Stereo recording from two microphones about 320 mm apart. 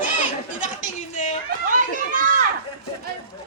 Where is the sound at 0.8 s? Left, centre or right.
Left.